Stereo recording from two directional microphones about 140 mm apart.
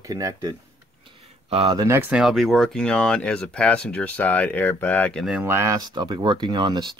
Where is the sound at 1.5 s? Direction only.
40° right (ahead or behind).